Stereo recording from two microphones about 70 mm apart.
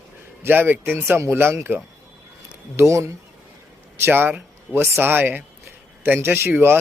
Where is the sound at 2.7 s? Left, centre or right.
Right.